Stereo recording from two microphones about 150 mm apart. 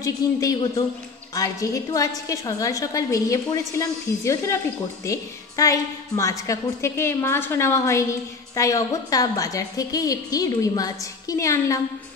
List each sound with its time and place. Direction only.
0.0 s a woman's voice: 25° left (ahead or behind)